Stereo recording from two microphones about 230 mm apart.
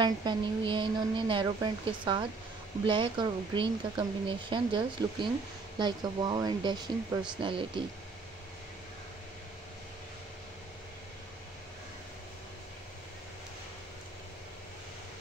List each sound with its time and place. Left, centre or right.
0.0 s speech: centre